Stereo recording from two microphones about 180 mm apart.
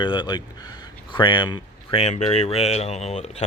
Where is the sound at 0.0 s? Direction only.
25° left (ahead or behind).